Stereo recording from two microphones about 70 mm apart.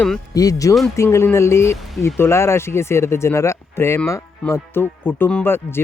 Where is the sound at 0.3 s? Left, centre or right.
Left.